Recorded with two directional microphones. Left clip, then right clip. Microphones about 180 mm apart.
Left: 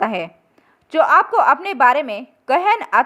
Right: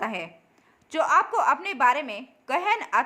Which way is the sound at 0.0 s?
45° left (ahead or behind).